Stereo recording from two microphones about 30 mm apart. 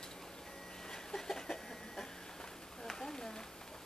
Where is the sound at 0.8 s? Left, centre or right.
Centre.